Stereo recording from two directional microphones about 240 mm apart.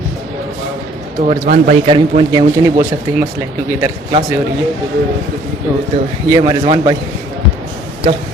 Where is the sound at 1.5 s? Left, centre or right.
Right.